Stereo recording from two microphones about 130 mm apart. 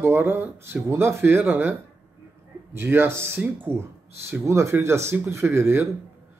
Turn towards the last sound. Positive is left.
turn(degrees=-20)  # may be behind; listen again after turning